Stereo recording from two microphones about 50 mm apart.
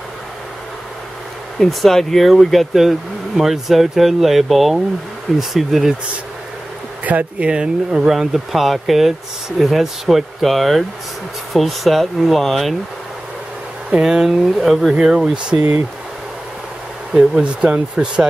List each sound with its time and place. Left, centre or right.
1.6 s speech: centre
7.1 s speech: right
7.4 s speech: centre
14.0 s speech: centre
17.1 s speech: centre